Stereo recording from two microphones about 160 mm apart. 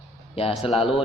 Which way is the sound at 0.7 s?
Centre (ahead or behind).